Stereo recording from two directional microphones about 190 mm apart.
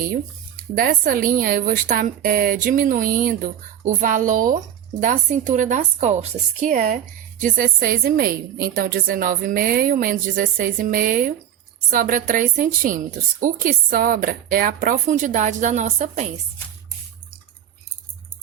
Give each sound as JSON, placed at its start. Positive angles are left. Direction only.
{"t": 0.8, "sound": "a woman's voice", "side_deg": -50}